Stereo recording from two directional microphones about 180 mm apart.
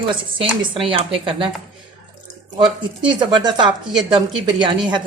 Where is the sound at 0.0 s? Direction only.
25° right (ahead or behind).